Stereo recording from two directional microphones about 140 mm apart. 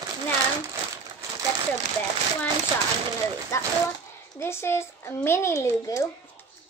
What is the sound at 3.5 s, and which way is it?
Speech, 20° left (ahead or behind).